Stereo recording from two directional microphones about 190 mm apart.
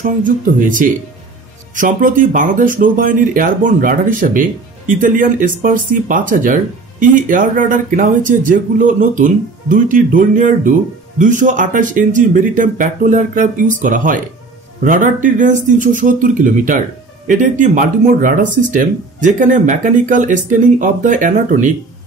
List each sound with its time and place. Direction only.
0.0 s speech: 45° right (ahead or behind)